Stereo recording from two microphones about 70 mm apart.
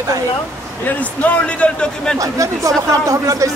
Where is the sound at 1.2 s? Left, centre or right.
Centre.